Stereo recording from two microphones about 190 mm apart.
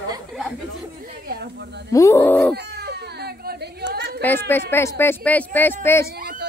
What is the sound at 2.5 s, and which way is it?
Baby cry, 60° right (ahead or behind).